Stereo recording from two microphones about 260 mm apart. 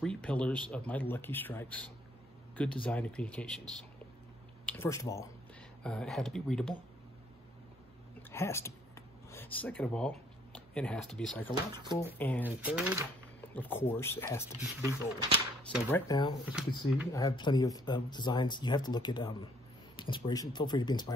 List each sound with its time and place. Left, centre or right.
0.0 s speech: centre
4.6 s speech: centre
8.2 s a sound: centre
11.5 s speech: centre
12.2 s speech: centre
12.4 s speech: centre
13.6 s speech: centre
14.6 s speech: centre
15.9 s speech: centre